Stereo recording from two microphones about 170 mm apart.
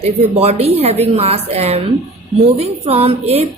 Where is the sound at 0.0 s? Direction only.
35° right (ahead or behind).